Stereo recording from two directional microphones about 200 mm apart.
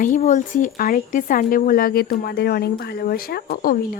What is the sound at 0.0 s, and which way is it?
Speech, 40° left (ahead or behind).